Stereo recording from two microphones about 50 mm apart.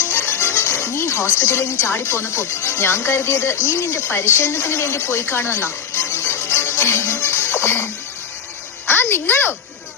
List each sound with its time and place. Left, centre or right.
0.1 s music: left
1.0 s speech: left
3.7 s a sound: left
8.9 s a child's voice: left